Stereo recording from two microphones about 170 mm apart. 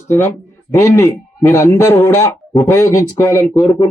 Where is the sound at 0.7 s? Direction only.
15° left (ahead or behind).